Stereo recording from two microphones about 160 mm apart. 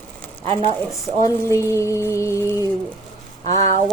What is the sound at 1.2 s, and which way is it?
Music, 20° left (ahead or behind).